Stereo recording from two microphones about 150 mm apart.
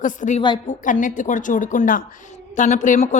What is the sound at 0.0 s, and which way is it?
A woman's voice, 60° left (ahead or behind).